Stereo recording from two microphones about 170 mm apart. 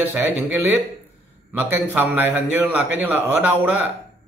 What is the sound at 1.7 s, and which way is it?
Speech, 10° right (ahead or behind).